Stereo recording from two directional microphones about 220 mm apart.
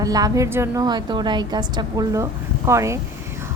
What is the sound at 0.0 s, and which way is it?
A woman's voice, 15° right (ahead or behind).